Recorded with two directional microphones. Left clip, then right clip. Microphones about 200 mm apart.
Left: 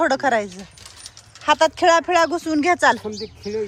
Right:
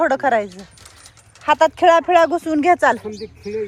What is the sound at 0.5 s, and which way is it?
Keys jangling, 45° right (ahead or behind).